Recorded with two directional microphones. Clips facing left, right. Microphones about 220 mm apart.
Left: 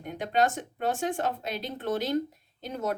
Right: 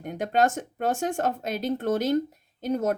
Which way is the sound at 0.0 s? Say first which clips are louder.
Right 3 dB; 45° right (ahead or behind).